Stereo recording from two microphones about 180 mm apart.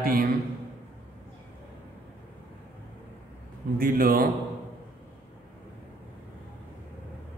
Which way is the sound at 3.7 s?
55° right (ahead or behind).